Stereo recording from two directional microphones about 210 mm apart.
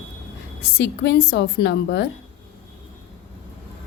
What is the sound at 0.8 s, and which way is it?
A woman's voice, 60° left (ahead or behind).